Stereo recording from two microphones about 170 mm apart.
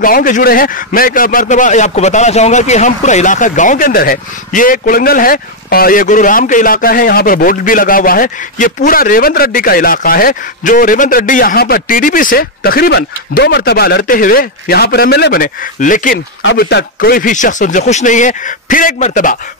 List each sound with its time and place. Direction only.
0.0 s a man's voice: 55° left (ahead or behind)